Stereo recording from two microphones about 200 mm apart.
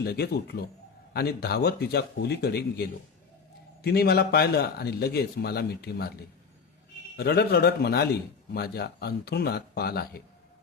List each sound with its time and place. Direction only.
0.0 s speech: 55° left (ahead or behind)
3.8 s speech: 50° left (ahead or behind)
7.2 s speech: 50° left (ahead or behind)